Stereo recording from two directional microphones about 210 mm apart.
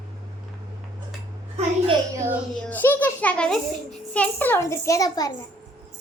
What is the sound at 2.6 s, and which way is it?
A child's voice, 10° left (ahead or behind).